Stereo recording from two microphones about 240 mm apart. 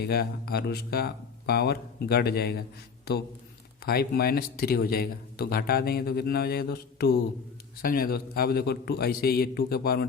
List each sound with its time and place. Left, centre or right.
0.0 s speech: left
3.8 s speech: left